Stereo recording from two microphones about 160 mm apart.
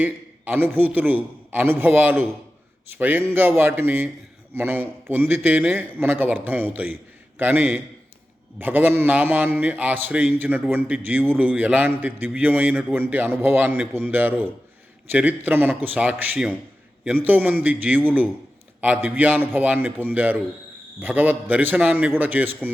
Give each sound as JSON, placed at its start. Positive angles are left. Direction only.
{"t": 0.0, "sound": "a man's voice", "side_deg": -10}